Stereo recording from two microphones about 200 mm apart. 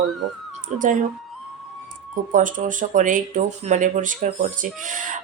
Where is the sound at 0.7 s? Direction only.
35° right (ahead or behind).